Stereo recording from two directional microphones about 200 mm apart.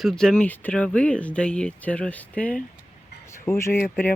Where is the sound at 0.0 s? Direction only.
Centre (ahead or behind).